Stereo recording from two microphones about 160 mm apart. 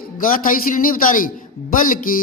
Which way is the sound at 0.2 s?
60° left (ahead or behind).